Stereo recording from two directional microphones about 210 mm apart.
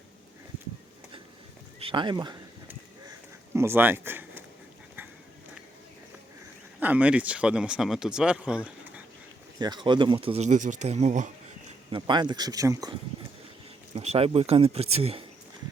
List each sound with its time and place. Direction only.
1.8 s speech: 25° right (ahead or behind)
3.5 s speech: 10° right (ahead or behind)
6.7 s speech: 5° right (ahead or behind)
9.6 s speech: 20° right (ahead or behind)
11.9 s speech: 20° right (ahead or behind)
13.9 s speech: 30° right (ahead or behind)